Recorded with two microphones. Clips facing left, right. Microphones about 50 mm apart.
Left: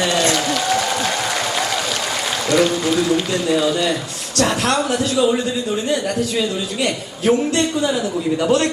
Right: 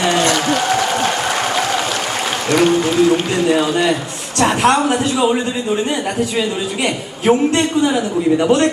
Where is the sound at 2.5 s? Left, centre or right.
Right.